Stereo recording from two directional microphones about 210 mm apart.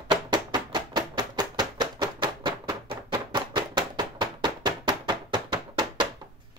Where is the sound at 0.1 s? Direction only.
20° right (ahead or behind).